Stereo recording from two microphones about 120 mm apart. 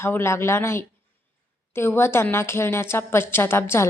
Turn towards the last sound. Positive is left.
turn(degrees=20)  # may be behind; listen again after turning